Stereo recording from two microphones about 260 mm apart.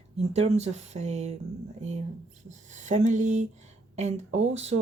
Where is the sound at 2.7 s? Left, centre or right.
Right.